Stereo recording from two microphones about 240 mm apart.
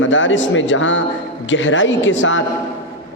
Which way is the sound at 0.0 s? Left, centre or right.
Left.